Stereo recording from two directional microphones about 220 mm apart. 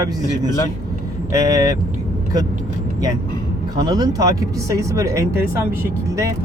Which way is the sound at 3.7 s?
20° right (ahead or behind).